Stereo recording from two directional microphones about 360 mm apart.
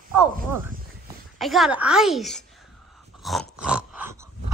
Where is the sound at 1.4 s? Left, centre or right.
Centre.